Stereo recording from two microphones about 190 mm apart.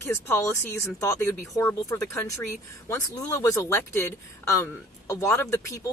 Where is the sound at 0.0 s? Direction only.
10° left (ahead or behind).